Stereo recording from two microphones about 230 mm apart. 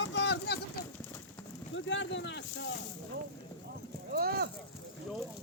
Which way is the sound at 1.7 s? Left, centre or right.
Left.